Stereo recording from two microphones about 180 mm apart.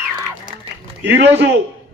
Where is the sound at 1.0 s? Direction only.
75° right (ahead or behind).